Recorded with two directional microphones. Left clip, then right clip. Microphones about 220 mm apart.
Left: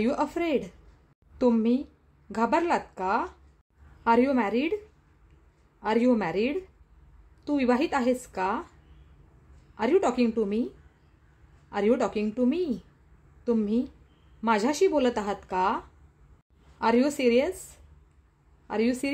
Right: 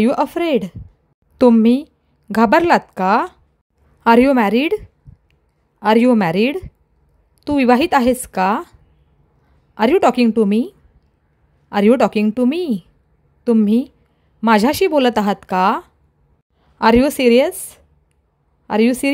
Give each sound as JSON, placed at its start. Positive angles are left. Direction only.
{"t": 0.0, "sound": "a woman's voice", "side_deg": -40}
{"t": 9.8, "sound": "speech", "side_deg": -45}
{"t": 11.7, "sound": "a woman's voice", "side_deg": -45}
{"t": 18.7, "sound": "speech", "side_deg": -40}